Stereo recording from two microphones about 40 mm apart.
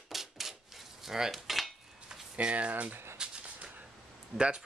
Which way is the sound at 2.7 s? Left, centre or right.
Right.